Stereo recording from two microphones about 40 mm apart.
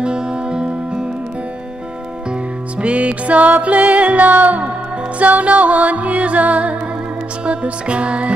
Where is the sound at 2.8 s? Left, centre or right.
Right.